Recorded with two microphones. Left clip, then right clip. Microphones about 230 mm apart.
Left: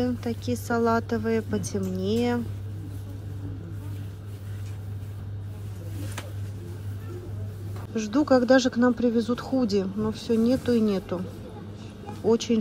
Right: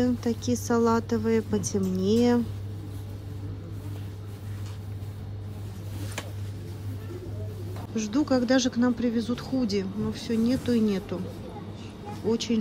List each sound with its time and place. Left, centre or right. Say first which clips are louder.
0.0 s speech: right 2 dB; centre
7.9 s speech: left 4 dB; centre
12.3 s speech: left 5 dB; centre